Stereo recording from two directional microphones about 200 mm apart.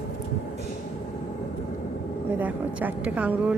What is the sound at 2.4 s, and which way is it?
Speech, 10° right (ahead or behind).